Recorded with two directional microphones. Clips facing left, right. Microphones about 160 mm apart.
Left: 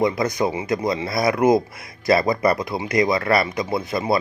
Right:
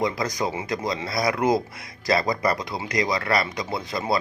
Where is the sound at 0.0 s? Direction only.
25° left (ahead or behind).